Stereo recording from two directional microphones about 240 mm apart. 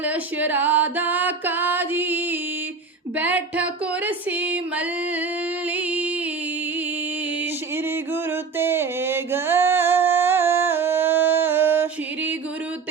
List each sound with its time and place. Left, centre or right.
0.0 s music: centre
8.1 s music: centre